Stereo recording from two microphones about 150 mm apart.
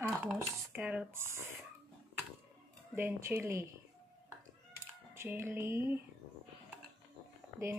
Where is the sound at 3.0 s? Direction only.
15° right (ahead or behind).